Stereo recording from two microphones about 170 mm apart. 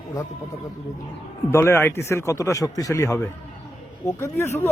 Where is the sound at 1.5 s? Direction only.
15° left (ahead or behind).